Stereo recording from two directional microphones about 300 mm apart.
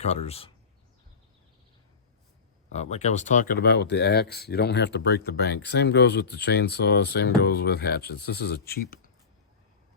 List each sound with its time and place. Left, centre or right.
0.0 s speech: left
2.7 s speech: left